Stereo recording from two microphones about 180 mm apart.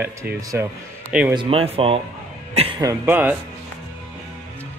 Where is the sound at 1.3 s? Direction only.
30° right (ahead or behind).